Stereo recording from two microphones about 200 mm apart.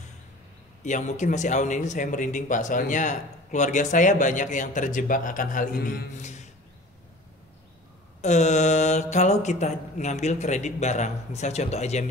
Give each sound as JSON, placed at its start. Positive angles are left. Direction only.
{"t": 0.8, "sound": "speech", "side_deg": 35}
{"t": 8.2, "sound": "speech", "side_deg": 35}